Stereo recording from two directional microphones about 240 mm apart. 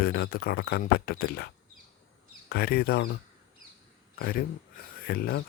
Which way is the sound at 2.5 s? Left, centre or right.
Left.